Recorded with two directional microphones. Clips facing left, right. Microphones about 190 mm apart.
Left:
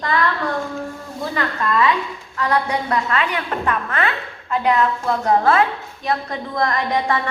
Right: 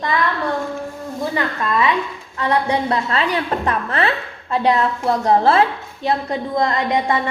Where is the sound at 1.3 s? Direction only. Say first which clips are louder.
Left 1 dB; 20° right (ahead or behind).